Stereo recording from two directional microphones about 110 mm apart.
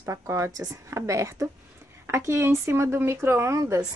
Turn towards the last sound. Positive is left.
turn(degrees=-25)  # may be behind; listen again after turning